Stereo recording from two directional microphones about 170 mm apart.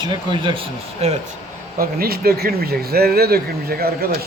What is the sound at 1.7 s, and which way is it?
Speech, 65° right (ahead or behind).